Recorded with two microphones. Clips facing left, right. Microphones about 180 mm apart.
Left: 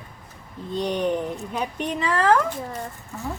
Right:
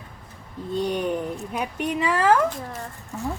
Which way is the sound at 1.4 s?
5° right (ahead or behind).